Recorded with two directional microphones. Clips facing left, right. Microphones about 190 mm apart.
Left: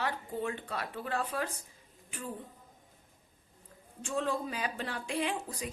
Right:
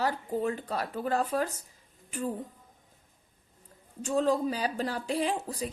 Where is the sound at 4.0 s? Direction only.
40° right (ahead or behind).